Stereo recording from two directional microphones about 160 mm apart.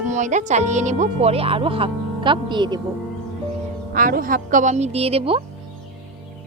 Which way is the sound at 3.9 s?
60° right (ahead or behind).